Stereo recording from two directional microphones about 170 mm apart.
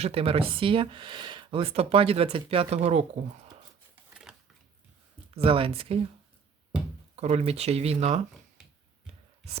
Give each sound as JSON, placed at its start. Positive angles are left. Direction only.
{"t": 0.0, "sound": "speech", "side_deg": -35}
{"t": 4.3, "sound": "a sound", "side_deg": -5}
{"t": 5.4, "sound": "speech", "side_deg": -35}
{"t": 7.2, "sound": "speech", "side_deg": -40}